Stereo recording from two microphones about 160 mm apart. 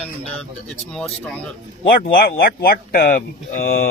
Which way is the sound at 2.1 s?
70° left (ahead or behind).